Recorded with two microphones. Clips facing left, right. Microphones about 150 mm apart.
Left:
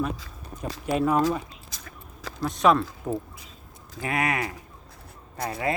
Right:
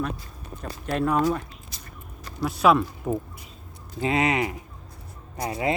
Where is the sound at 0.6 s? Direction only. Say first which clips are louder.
Left 1 dB; 5° left (ahead or behind).